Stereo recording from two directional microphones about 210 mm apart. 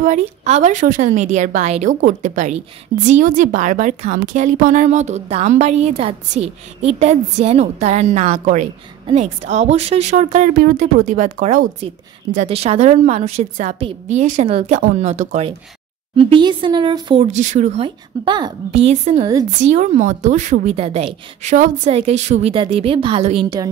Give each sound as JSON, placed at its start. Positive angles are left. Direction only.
{"t": 0.0, "sound": "a woman's voice", "side_deg": -35}